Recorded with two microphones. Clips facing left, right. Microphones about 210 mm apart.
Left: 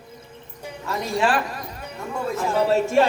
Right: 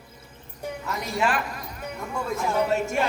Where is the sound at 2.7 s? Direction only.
30° left (ahead or behind).